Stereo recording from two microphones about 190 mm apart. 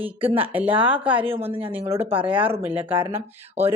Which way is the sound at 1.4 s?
30° right (ahead or behind).